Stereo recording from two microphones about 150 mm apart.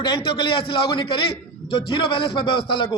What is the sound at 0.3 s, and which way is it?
A man's voice, 35° left (ahead or behind).